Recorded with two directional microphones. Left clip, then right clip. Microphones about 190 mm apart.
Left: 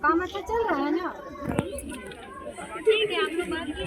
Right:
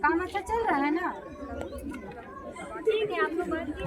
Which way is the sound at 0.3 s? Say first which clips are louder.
Left 1 dB; 15° right (ahead or behind).